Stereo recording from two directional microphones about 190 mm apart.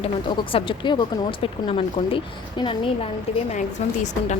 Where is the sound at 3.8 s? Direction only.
35° left (ahead or behind).